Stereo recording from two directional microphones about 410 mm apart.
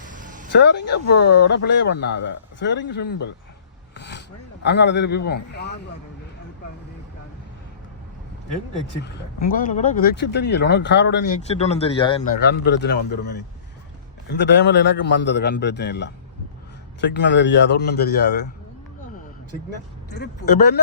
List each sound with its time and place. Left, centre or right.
0.0 s a sound: centre
0.5 s speech: left
3.9 s filing: left
4.6 s speech: left
9.5 s speech: centre
12.4 s speech: left
14.3 s speech: left
17.2 s speech: left